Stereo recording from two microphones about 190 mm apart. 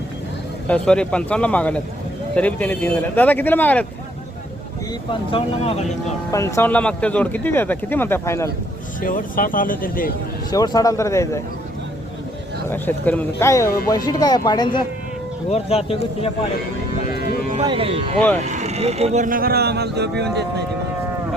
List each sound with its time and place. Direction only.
0.7 s speech: 5° left (ahead or behind)
5.3 s speech: 30° left (ahead or behind)
6.3 s speech: 15° left (ahead or behind)
9.0 s speech: 45° left (ahead or behind)
10.5 s speech: 20° left (ahead or behind)
12.6 s speech: 10° left (ahead or behind)
15.4 s speech: 35° left (ahead or behind)
17.7 s speech: 30° right (ahead or behind); by 20.7 s 60° right (ahead or behind)